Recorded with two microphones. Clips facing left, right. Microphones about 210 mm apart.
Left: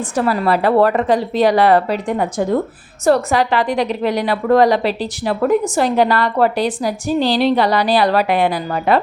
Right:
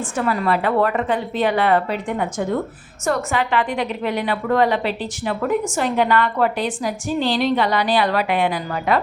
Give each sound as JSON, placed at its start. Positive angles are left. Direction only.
{"t": 0.2, "sound": "a woman's voice", "side_deg": 35}